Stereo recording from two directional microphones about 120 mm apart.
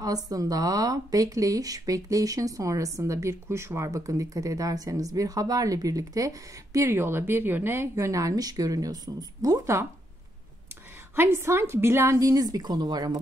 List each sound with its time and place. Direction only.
0.0 s speech: 30° right (ahead or behind)
11.1 s speech: 20° right (ahead or behind)